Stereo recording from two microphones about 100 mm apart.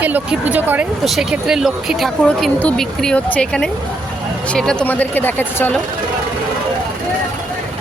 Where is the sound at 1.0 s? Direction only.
5° right (ahead or behind).